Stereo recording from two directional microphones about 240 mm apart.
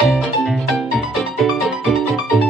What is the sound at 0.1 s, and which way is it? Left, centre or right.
Music, centre.